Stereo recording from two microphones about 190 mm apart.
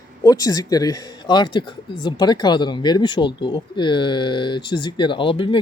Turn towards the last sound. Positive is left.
turn(degrees=25)  # may be behind; listen again after turning